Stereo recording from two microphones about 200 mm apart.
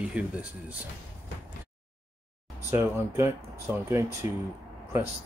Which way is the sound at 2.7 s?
15° right (ahead or behind).